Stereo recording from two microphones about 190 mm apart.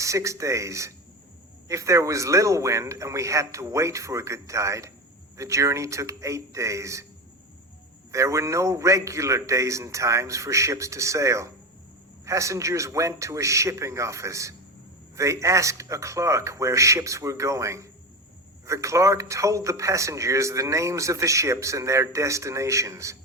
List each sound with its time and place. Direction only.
0.0 s a man's voice: 15° right (ahead or behind)
8.1 s a man's voice: 15° right (ahead or behind)